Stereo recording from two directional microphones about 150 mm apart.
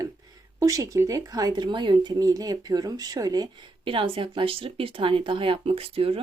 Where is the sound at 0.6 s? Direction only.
20° right (ahead or behind).